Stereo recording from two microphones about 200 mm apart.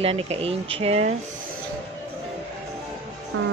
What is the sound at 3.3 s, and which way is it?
Music, 90° right.